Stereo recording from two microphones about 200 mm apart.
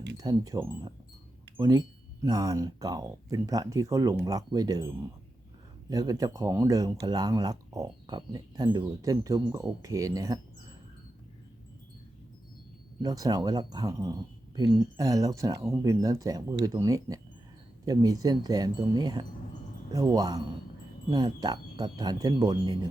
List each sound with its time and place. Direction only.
0.2 s speech: 20° right (ahead or behind)
5.9 s speech: 20° right (ahead or behind)
13.0 s speech: 20° right (ahead or behind)